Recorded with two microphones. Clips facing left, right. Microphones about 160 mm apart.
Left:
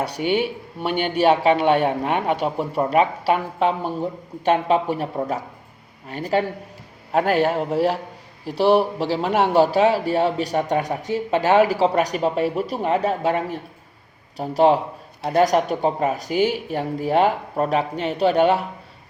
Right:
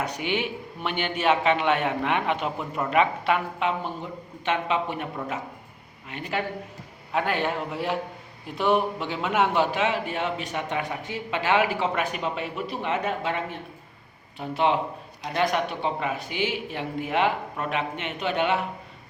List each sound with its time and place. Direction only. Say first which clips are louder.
0.0 s speech: left 6 dB; 35° left (ahead or behind)